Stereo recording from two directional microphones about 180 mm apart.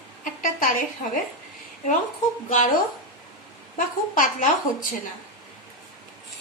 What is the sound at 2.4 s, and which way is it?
Speech, 45° left (ahead or behind).